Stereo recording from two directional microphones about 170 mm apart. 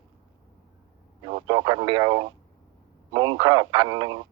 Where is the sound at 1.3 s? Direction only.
25° right (ahead or behind).